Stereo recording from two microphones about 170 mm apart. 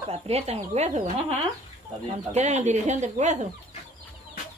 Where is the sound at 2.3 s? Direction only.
45° right (ahead or behind).